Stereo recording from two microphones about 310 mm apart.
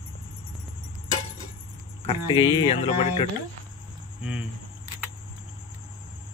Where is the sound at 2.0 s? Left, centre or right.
Centre.